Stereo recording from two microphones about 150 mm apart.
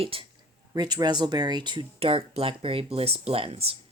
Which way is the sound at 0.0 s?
40° right (ahead or behind).